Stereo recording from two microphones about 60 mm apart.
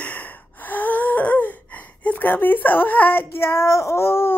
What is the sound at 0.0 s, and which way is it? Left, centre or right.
Gasp, left.